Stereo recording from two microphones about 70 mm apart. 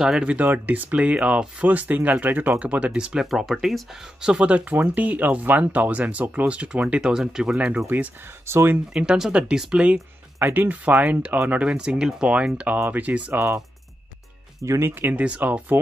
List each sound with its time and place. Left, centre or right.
0.0 s speech: centre
0.5 s speech: right
3.3 s speech: centre
7.5 s speech: centre
7.8 s speech: right
8.9 s speech: centre
10.4 s speech: right
11.7 s speech: centre
13.3 s speech: right
14.6 s speech: right
15.2 s speech: centre